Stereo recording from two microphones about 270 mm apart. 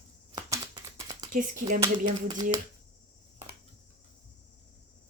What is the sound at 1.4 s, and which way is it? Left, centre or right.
Speech, right.